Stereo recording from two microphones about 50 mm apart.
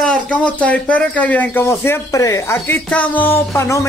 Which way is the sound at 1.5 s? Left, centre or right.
Left.